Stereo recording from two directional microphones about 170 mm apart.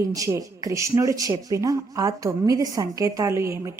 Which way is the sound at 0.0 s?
20° right (ahead or behind).